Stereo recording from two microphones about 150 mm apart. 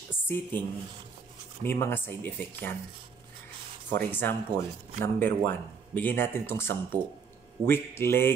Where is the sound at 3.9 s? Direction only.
15° left (ahead or behind).